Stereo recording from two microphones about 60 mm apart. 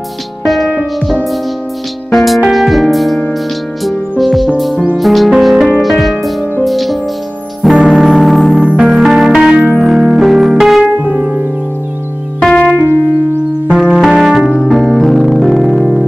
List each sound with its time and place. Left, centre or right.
0.5 s music: centre
4.2 s music: centre
10.8 s music: right
12.4 s keyboard: centre
13.9 s music: centre